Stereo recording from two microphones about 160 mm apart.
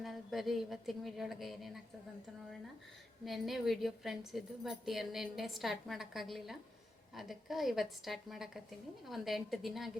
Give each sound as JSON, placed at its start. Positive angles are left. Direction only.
{"t": 0.0, "sound": "a woman's voice", "side_deg": 0}
{"t": 3.2, "sound": "a woman's voice", "side_deg": 0}